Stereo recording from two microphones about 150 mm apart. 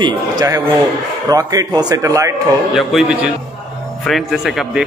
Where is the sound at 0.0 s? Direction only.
25° right (ahead or behind).